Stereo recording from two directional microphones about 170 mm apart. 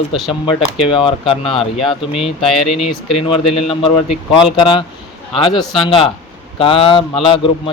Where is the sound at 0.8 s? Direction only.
30° left (ahead or behind).